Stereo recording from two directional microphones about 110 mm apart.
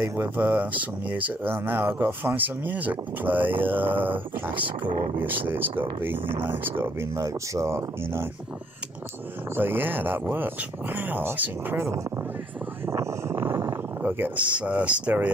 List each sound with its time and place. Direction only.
0.1 s speech: 20° right (ahead or behind)
5.2 s speech: 15° right (ahead or behind)
9.6 s speech: 20° right (ahead or behind)
12.8 s a sound: 25° right (ahead or behind)